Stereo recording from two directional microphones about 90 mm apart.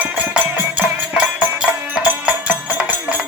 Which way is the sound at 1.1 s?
10° right (ahead or behind).